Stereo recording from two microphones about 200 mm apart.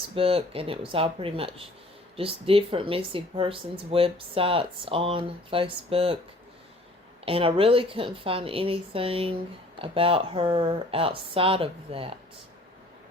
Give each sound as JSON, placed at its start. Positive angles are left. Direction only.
{"t": 0.1, "sound": "speech", "side_deg": -30}
{"t": 7.3, "sound": "speech", "side_deg": -25}